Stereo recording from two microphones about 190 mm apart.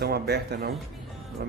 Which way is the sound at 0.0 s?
60° right (ahead or behind).